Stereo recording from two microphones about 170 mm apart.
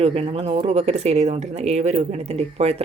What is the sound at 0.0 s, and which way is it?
A woman's voice, 35° right (ahead or behind).